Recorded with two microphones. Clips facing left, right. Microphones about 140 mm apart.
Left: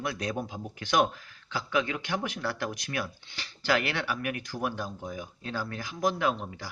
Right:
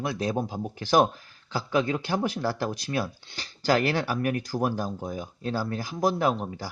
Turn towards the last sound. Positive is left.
turn(degrees=-35)  # may be behind; listen again after turning